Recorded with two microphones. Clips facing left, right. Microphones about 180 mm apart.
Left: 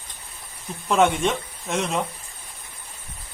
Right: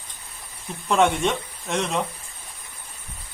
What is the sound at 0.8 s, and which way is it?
Speech, centre (ahead or behind).